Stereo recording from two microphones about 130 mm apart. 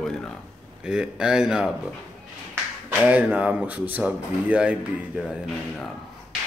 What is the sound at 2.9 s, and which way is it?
Speech, 10° right (ahead or behind).